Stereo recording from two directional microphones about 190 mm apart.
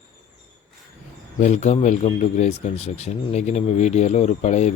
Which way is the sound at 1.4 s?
35° left (ahead or behind).